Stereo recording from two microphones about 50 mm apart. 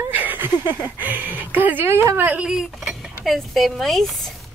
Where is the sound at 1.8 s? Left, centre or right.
Right.